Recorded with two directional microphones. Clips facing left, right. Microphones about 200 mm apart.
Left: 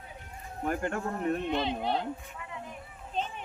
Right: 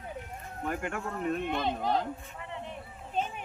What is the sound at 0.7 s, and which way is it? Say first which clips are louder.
Speech: left 3 dB; 35° left (ahead or behind).